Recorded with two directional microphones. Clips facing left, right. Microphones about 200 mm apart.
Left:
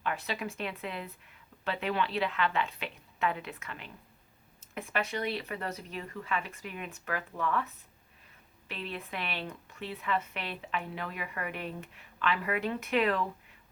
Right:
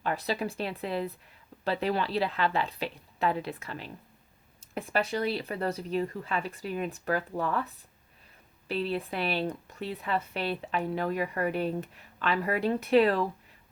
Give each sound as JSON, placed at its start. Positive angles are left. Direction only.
{"t": 0.0, "sound": "speech", "side_deg": -35}